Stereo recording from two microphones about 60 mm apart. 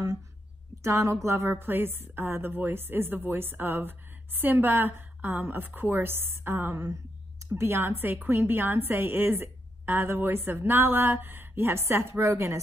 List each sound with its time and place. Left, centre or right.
0.8 s a woman's voice: right